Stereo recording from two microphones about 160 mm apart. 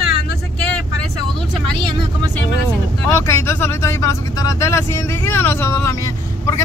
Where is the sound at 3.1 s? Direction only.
15° left (ahead or behind).